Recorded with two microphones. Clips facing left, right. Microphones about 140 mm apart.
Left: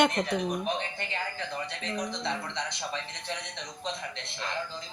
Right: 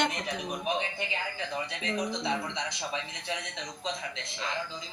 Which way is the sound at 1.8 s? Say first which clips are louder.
Right 2 dB; 5° right (ahead or behind).